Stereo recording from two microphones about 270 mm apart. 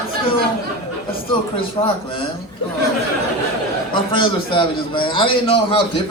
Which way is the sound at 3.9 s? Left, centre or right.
Centre.